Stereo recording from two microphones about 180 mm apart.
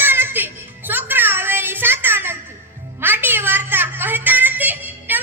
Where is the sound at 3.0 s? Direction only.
10° right (ahead or behind).